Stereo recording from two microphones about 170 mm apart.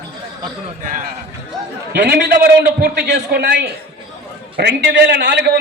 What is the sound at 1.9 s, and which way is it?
A man's voice, 70° right (ahead or behind).